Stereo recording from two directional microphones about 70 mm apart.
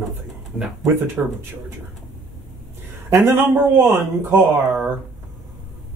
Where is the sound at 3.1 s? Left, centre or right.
Right.